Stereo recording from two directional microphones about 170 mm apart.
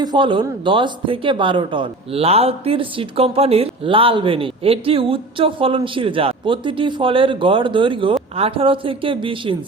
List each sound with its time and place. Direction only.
0.0 s speech: 25° right (ahead or behind)